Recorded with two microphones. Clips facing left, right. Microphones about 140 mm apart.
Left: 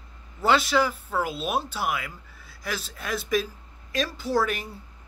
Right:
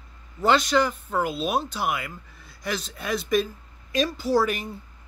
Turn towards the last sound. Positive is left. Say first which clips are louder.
# right 3 dB
turn(degrees=0)  # may be behind; listen again after turning